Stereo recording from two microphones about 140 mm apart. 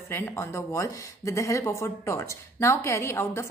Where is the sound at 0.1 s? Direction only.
15° left (ahead or behind).